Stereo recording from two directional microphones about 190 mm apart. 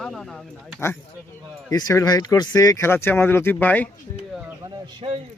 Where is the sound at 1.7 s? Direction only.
15° left (ahead or behind).